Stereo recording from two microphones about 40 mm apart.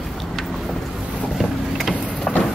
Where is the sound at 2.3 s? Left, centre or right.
Centre.